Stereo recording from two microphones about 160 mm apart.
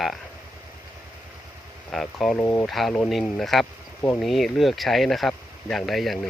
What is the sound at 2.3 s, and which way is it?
Speech, 15° left (ahead or behind).